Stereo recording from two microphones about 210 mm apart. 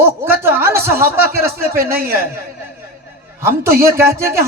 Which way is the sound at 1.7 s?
45° right (ahead or behind).